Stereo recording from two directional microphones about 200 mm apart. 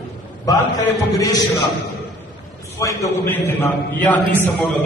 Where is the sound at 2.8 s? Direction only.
15° left (ahead or behind).